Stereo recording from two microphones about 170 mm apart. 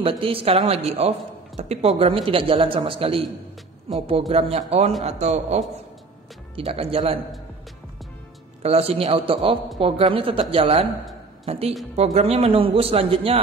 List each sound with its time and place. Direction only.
0.0 s a man's voice: 30° right (ahead or behind)
8.6 s a man's voice: 35° right (ahead or behind)